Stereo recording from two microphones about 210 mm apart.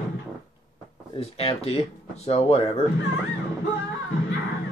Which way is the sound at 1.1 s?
25° left (ahead or behind).